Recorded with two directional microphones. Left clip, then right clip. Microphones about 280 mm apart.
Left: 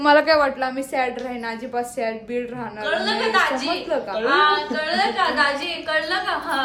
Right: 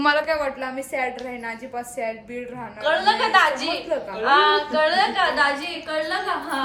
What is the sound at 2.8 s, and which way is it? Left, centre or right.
Speech, centre.